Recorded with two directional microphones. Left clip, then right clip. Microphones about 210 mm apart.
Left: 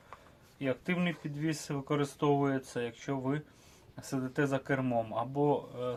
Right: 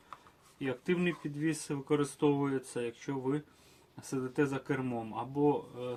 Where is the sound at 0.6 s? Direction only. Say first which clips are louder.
Even; 30° left (ahead or behind).